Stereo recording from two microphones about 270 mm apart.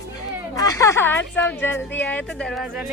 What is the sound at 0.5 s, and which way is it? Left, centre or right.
A woman's voice, centre.